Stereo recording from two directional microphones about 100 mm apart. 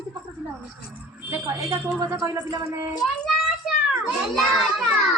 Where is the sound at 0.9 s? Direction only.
25° right (ahead or behind).